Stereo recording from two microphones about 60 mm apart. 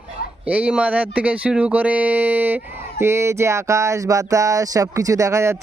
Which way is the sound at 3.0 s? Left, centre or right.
Right.